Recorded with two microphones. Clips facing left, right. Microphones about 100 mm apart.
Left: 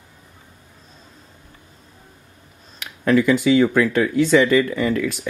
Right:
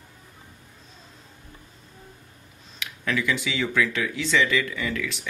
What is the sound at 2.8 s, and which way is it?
Speech, 45° left (ahead or behind).